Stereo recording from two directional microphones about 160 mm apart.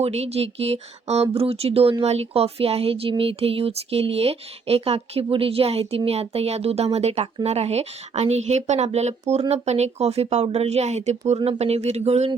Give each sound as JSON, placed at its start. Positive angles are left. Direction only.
{"t": 0.0, "sound": "speech", "side_deg": -40}